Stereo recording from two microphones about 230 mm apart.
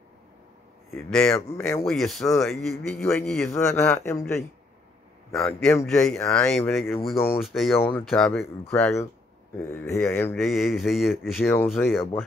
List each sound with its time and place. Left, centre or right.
0.9 s a man's voice: centre
5.3 s a man's voice: centre
10.4 s a man's voice: centre